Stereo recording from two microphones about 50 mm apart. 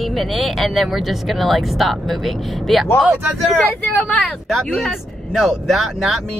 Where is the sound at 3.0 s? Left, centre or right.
Right.